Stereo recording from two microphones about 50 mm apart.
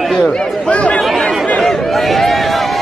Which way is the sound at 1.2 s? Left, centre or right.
Left.